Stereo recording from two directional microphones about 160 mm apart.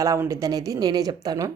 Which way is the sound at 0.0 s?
20° right (ahead or behind).